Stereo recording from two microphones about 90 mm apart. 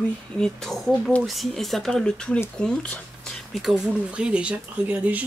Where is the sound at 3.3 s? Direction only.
Centre (ahead or behind).